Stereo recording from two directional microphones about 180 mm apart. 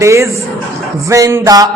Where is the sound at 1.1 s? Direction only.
15° right (ahead or behind).